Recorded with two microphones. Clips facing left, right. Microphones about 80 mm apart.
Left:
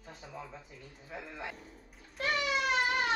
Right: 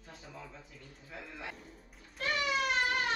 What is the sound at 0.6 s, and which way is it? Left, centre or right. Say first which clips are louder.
Speech: left 3 dB; centre.